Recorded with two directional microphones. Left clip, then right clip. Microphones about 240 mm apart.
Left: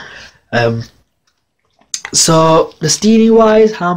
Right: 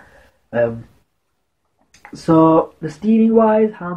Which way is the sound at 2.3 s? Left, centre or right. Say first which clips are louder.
Left 2 dB; left.